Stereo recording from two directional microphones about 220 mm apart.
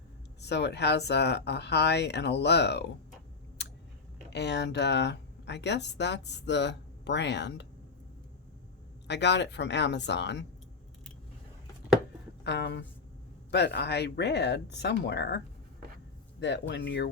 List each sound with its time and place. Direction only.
0.4 s speech: 50° left (ahead or behind)
4.3 s speech: 50° left (ahead or behind)
9.0 s speech: 50° left (ahead or behind)
12.5 s speech: 50° left (ahead or behind)
16.4 s speech: 50° left (ahead or behind)